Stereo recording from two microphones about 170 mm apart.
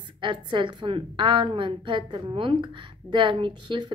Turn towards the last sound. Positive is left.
turn(degrees=-30)  # may be behind; listen again after turning